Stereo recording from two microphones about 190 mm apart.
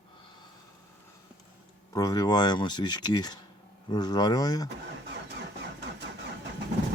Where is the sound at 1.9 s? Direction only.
20° left (ahead or behind).